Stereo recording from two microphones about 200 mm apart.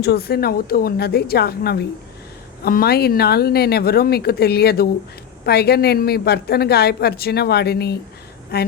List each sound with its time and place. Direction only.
0.0 s a woman's voice: 55° left (ahead or behind)